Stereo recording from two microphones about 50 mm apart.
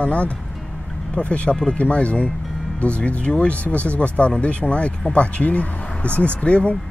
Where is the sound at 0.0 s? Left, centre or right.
Left.